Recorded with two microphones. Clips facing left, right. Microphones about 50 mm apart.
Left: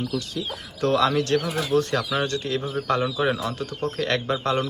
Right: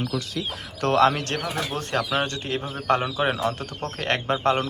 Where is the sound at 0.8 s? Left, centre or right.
Right.